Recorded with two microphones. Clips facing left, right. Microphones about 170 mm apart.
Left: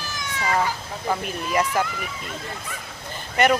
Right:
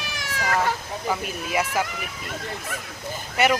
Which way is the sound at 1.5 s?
5° right (ahead or behind).